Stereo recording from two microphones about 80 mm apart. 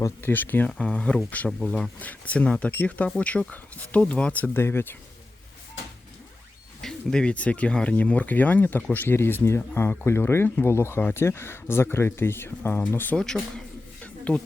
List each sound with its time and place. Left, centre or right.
0.2 s speech: left
0.7 s speech: centre
6.8 s speech: centre; by 13.1 s left
13.1 s speech: centre
14.0 s a sound: centre